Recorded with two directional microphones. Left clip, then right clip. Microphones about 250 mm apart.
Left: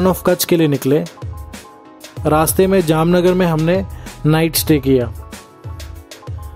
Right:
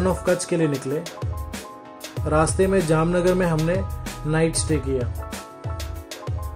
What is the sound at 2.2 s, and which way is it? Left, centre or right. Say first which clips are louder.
Speech: left 6 dB; left.